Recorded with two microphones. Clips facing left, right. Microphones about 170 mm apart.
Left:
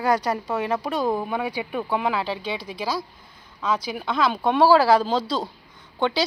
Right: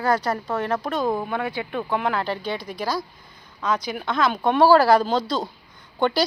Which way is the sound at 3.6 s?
5° left (ahead or behind).